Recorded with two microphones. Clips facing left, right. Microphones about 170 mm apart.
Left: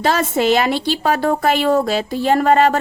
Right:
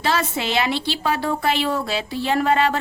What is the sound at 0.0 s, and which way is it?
A woman's voice, 45° left (ahead or behind).